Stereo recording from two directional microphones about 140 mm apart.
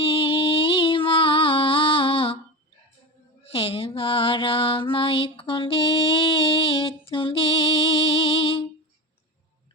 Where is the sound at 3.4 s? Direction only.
45° left (ahead or behind).